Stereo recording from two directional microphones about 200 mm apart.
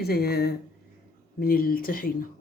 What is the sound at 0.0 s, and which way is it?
Speech, 50° left (ahead or behind).